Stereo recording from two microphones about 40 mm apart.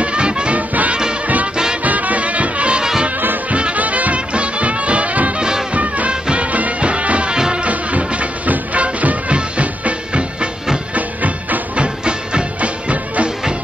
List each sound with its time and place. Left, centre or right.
0.0 s music: right
0.6 s music: right
2.8 s music: centre
3.7 s music: right
7.3 s music: centre
7.6 s music: right